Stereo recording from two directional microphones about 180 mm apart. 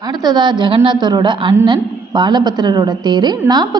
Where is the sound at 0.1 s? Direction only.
20° right (ahead or behind).